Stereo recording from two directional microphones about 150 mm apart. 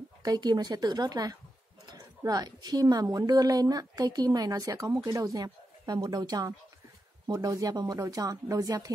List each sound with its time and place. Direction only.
0.2 s a woman's voice: 25° right (ahead or behind)